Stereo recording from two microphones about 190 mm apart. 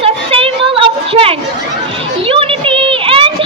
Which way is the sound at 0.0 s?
30° right (ahead or behind).